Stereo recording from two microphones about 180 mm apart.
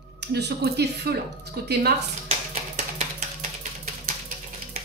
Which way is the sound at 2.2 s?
40° right (ahead or behind).